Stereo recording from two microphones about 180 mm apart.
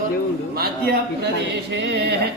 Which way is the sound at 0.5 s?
60° right (ahead or behind).